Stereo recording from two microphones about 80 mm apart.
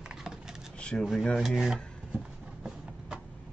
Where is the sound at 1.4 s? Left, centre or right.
Centre.